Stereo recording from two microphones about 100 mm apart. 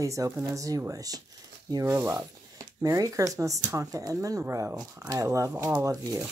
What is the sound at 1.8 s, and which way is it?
Speech, 25° right (ahead or behind).